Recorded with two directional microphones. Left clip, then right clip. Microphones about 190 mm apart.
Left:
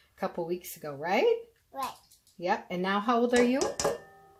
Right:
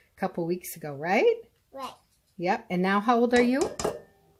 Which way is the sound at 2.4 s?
40° right (ahead or behind).